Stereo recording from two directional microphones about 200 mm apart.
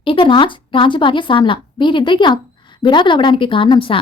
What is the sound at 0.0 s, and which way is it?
Speech, 25° left (ahead or behind).